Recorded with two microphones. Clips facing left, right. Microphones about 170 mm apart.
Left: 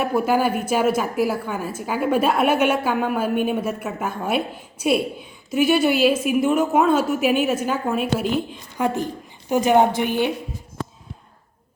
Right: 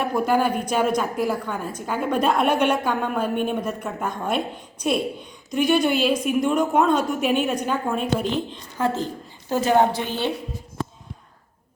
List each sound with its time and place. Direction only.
0.0 s a woman's voice: 5° left (ahead or behind)